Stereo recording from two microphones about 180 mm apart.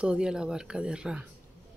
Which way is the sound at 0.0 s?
5° right (ahead or behind).